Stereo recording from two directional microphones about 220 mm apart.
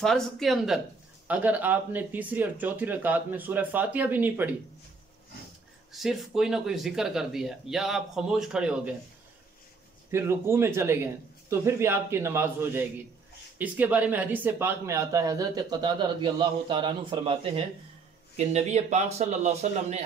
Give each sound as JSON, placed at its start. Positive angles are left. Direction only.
{"t": 0.0, "sound": "speech", "side_deg": 0}
{"t": 5.9, "sound": "speech", "side_deg": 0}
{"t": 10.1, "sound": "a man's voice", "side_deg": -10}